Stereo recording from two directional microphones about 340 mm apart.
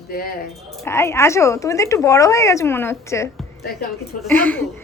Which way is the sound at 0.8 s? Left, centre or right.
Centre.